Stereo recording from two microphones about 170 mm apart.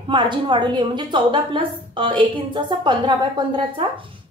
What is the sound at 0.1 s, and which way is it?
A woman's voice, 30° right (ahead or behind).